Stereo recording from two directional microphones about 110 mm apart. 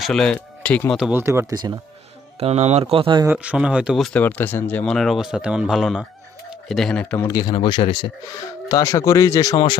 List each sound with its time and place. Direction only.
0.0 s speech: 5° left (ahead or behind)
0.9 s speech: 5° right (ahead or behind)
1.1 s speech: 25° right (ahead or behind)
2.4 s speech: 75° right (ahead or behind)
2.9 s speech: 55° right (ahead or behind)
3.2 s speech: 10° right (ahead or behind)
4.0 s speech: 15° left (ahead or behind); by 6.1 s 5° right (ahead or behind)
6.5 s bird: centre (ahead or behind)
7.0 s speech: 15° left (ahead or behind)
7.3 s speech: 35° left (ahead or behind)
8.7 s speech: 30° left (ahead or behind)